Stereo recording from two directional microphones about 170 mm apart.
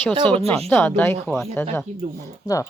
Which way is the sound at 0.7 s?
10° left (ahead or behind).